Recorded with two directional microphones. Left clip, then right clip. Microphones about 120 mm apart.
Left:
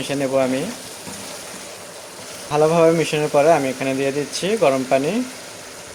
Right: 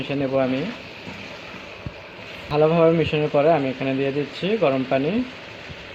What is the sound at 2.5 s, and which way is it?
Speech, 30° left (ahead or behind).